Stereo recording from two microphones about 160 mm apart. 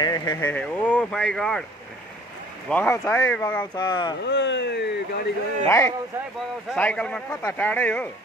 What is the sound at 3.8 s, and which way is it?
Speech, 25° left (ahead or behind).